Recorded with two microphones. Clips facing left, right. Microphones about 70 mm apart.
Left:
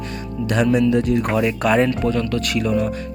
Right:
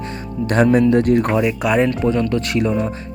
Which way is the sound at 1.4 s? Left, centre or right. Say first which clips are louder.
Right 1 dB; centre.